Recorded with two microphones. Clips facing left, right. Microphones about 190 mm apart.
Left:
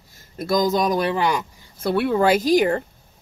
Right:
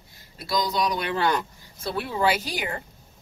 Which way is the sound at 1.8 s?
65° left (ahead or behind).